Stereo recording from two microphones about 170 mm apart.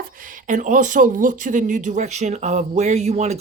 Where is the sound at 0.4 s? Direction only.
50° right (ahead or behind).